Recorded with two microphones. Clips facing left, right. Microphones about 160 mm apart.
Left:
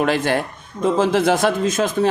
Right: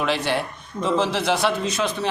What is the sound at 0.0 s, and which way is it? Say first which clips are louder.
A man's voice: left 4 dB; 50° left (ahead or behind).